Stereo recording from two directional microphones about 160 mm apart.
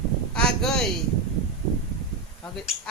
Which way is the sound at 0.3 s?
5° left (ahead or behind).